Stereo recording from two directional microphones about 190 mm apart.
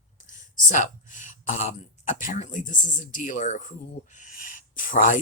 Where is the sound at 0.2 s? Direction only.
45° left (ahead or behind).